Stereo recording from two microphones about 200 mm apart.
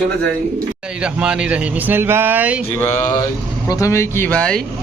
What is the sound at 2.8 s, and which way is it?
Speech, 10° left (ahead or behind).